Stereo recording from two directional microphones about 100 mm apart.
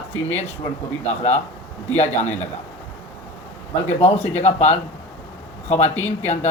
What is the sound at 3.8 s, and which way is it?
Speech, 90° left.